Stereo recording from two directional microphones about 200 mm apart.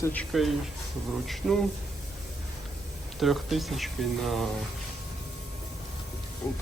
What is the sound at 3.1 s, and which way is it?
Speech, centre (ahead or behind).